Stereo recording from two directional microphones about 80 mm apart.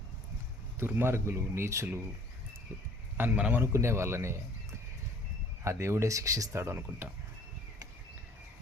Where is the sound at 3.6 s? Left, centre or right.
Right.